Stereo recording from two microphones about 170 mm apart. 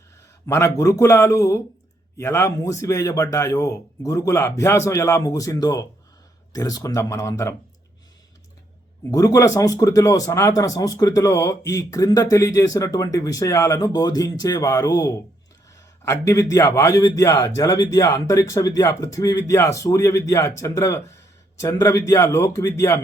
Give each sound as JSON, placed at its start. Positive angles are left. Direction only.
{"t": 0.4, "sound": "a man's voice", "side_deg": 20}
{"t": 9.0, "sound": "a man's voice", "side_deg": 20}